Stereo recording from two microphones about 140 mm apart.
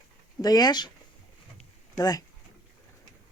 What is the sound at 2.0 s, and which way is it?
Speech, 25° left (ahead or behind).